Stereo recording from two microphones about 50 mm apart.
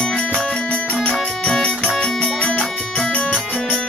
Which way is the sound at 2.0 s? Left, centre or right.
Centre.